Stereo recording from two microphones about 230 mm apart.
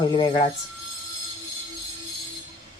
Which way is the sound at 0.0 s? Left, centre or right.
Left.